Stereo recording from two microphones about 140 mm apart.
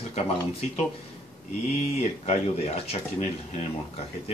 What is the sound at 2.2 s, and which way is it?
Speech, 50° left (ahead or behind).